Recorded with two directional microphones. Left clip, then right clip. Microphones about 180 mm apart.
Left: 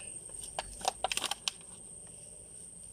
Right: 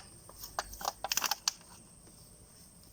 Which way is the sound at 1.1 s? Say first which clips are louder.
Right 2 dB; 25° left (ahead or behind).